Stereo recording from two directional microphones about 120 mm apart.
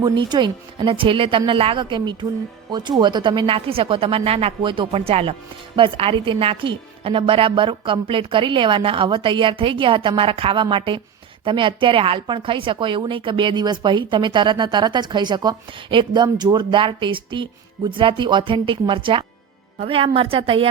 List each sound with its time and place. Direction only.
0.0 s a woman's voice: 40° right (ahead or behind)